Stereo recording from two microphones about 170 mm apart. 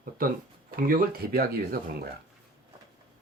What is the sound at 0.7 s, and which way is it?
Speech, 60° right (ahead or behind).